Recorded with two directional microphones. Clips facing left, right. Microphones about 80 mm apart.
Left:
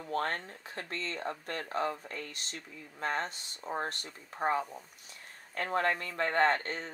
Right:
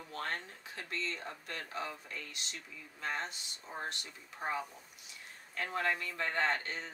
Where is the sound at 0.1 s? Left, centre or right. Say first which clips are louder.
Left 7 dB; left.